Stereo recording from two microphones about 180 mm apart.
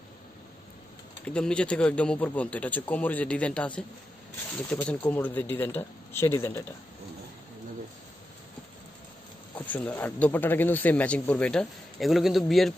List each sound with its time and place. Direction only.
1.2 s speech: 5° left (ahead or behind)
9.6 s speech: 10° left (ahead or behind)